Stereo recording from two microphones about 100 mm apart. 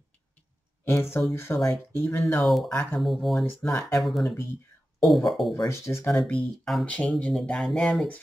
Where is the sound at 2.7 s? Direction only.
15° left (ahead or behind).